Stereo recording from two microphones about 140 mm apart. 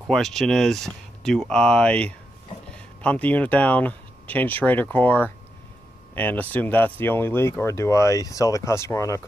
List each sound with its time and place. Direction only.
0.0 s speech: centre (ahead or behind); by 9.2 s 20° left (ahead or behind)